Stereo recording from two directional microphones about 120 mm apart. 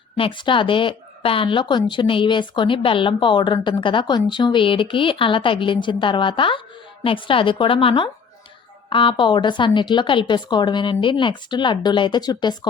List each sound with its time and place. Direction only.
0.2 s a woman's voice: 45° left (ahead or behind)